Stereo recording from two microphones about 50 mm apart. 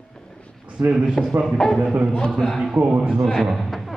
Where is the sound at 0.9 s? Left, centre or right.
Centre.